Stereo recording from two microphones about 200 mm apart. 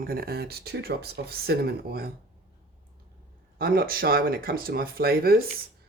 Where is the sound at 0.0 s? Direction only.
50° right (ahead or behind).